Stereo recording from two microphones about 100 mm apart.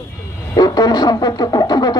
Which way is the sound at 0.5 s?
40° left (ahead or behind).